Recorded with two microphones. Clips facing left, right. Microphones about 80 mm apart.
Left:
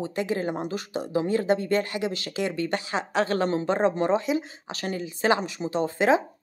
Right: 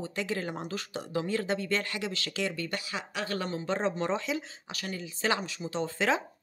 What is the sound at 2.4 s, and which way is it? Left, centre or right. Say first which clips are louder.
Speech: left 7 dB; left.